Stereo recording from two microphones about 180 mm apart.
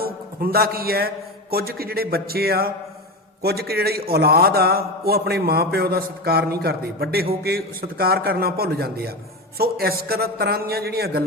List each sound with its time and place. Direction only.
0.0 s a man's voice: 55° right (ahead or behind)